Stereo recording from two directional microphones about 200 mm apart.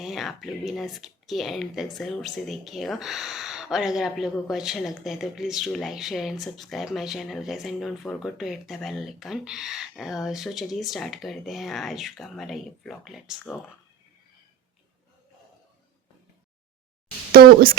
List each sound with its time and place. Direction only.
0.0 s speech: centre (ahead or behind)
17.3 s speech: 45° right (ahead or behind)